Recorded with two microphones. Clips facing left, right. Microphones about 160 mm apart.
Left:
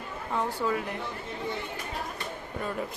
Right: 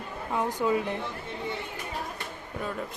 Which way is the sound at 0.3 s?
15° right (ahead or behind).